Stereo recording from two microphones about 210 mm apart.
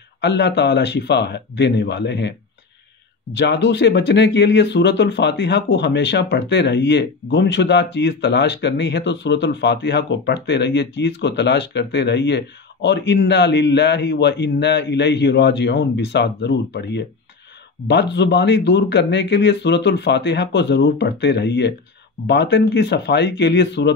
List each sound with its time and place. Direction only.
0.2 s speech: 55° left (ahead or behind)
3.3 s speech: 55° left (ahead or behind)